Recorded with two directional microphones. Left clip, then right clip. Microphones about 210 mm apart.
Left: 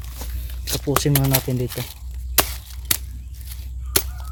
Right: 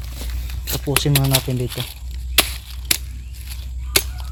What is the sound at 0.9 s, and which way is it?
Speech, 20° left (ahead or behind).